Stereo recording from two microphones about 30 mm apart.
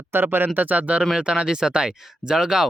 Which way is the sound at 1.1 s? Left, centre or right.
Right.